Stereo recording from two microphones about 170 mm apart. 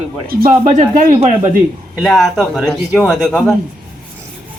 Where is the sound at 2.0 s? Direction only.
Centre (ahead or behind).